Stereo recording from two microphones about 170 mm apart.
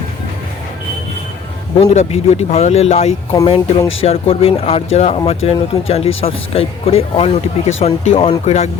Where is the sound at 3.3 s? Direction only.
20° left (ahead or behind).